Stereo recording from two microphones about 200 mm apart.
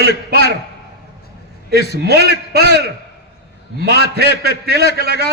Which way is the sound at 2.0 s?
55° right (ahead or behind).